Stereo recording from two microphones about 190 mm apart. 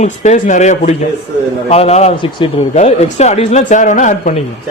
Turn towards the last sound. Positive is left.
turn(degrees=40)  # may be behind; listen again after turning